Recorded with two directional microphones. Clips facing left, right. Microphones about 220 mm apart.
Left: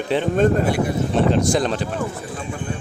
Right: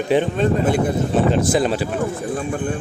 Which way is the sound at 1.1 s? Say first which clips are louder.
Even; 5° right (ahead or behind).